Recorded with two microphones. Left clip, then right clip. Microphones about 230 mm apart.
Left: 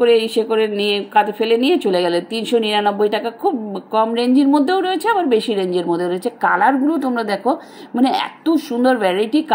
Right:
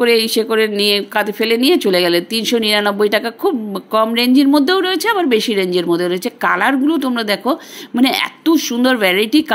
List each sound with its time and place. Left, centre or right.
0.0 s a woman's voice: right